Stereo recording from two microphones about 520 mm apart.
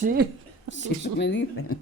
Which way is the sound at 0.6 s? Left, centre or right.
Left.